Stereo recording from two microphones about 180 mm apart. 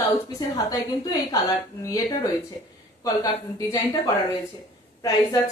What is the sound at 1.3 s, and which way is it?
Speech, 20° left (ahead or behind).